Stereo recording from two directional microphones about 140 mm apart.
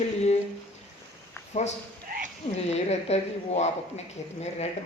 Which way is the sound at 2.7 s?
50° left (ahead or behind).